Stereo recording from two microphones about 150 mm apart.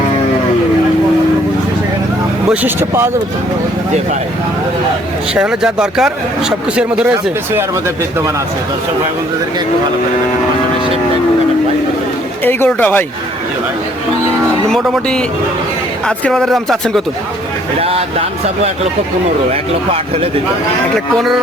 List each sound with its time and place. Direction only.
2.5 s speech: 15° right (ahead or behind)
5.3 s speech: 5° right (ahead or behind)
12.5 s speech: 15° left (ahead or behind)
14.7 s speech: 5° left (ahead or behind)
17.7 s speech: 40° right (ahead or behind)